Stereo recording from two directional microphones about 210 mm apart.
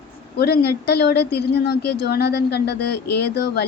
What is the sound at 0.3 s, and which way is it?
A woman's voice, 50° left (ahead or behind).